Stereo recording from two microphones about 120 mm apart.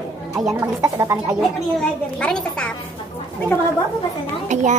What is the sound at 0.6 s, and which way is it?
Speech, 25° right (ahead or behind).